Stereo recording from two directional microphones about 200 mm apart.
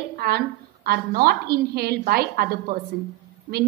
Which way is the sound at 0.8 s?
50° right (ahead or behind).